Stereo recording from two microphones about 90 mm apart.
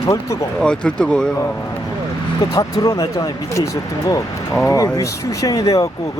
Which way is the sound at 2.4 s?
40° left (ahead or behind).